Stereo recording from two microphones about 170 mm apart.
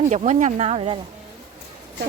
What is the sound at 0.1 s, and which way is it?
Speech, 45° right (ahead or behind).